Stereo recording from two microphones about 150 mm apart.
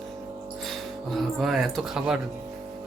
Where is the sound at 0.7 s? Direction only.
Centre (ahead or behind).